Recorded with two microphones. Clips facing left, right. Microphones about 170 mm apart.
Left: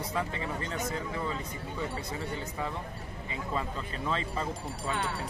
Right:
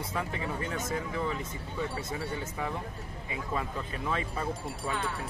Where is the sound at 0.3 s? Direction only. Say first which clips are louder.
Right 1 dB; 15° right (ahead or behind).